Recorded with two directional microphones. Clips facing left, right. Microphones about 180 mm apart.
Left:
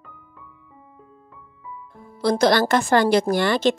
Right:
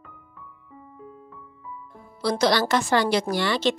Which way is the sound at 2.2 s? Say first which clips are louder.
Left 4 dB; 50° left (ahead or behind).